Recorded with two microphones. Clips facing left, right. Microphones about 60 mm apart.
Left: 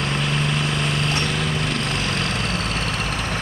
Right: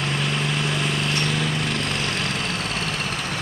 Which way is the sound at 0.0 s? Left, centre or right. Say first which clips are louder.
Left 1 dB; centre.